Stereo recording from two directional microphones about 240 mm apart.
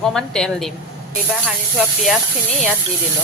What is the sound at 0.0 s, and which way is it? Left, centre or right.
Speech, centre.